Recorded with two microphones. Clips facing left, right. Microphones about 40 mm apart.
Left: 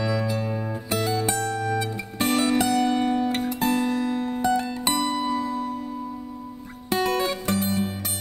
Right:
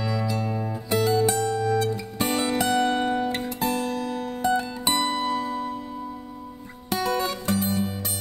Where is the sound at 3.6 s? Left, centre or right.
Left.